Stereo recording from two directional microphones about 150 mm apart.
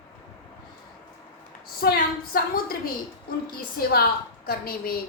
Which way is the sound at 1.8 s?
80° left.